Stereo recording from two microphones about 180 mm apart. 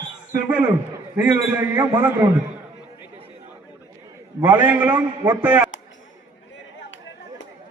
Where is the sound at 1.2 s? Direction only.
10° right (ahead or behind).